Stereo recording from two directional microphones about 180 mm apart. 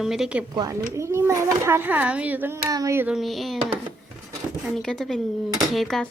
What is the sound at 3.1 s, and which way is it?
Speech, centre (ahead or behind).